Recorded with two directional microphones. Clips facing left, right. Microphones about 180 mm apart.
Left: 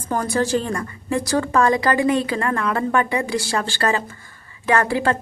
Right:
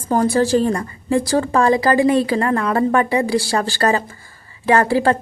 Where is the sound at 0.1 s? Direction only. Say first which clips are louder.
Right 5 dB; 30° right (ahead or behind).